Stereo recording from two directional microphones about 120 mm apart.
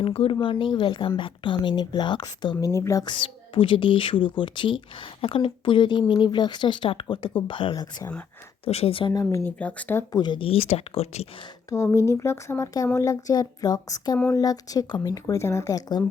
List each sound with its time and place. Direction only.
0.0 s speech: 50° left (ahead or behind); by 3.1 s 25° left (ahead or behind)
3.1 s speech: 45° left (ahead or behind)
8.6 s speech: 55° left (ahead or behind)
9.1 s speech: 25° left (ahead or behind)
9.6 s speech: 10° left (ahead or behind)
10.1 s speech: 40° left (ahead or behind); by 11.3 s 60° left (ahead or behind)
11.7 s speech: 25° left (ahead or behind)